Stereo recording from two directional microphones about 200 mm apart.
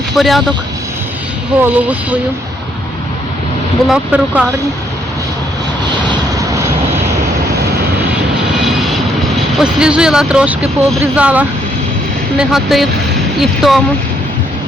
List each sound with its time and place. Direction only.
0.1 s speech: centre (ahead or behind)
1.7 s speech: 5° right (ahead or behind)
3.8 s speech: 5° right (ahead or behind)
9.6 s speech: 5° right (ahead or behind)